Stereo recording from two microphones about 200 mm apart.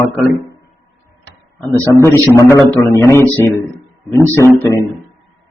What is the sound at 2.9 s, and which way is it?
A man's voice, 15° left (ahead or behind).